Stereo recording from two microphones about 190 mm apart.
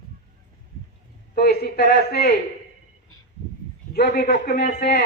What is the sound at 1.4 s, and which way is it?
Speech, 55° left (ahead or behind).